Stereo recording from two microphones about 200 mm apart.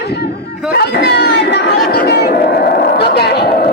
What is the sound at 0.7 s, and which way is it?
Speech, 55° left (ahead or behind).